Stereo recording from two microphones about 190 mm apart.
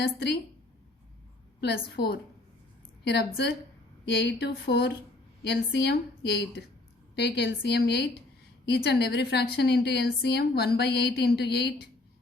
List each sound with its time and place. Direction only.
0.0 s a woman's voice: 60° left (ahead or behind)
1.6 s a woman's voice: 55° left (ahead or behind)